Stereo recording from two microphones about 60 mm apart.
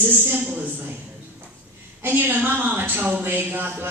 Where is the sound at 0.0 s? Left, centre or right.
Right.